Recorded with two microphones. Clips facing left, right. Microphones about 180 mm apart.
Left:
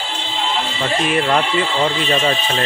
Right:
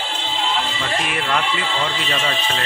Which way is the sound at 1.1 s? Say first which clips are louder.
Left 6 dB; 35° left (ahead or behind).